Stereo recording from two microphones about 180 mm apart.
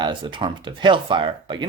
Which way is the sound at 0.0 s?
25° right (ahead or behind).